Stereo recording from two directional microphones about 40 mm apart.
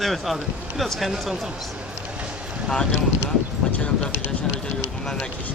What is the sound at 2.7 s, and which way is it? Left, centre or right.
Speech, centre.